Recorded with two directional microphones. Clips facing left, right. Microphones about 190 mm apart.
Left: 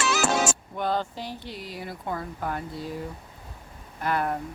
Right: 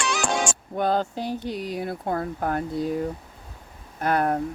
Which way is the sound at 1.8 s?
60° right (ahead or behind).